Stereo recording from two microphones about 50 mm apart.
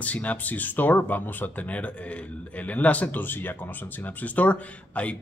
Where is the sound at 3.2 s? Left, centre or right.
Left.